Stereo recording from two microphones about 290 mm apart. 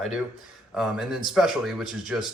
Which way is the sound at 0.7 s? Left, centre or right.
Centre.